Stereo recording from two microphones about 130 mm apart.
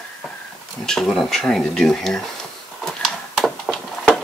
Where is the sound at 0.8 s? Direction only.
Centre (ahead or behind).